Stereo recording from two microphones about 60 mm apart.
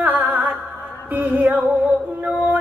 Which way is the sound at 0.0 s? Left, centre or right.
Right.